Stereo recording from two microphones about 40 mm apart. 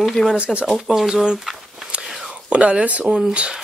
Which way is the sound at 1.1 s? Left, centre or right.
Centre.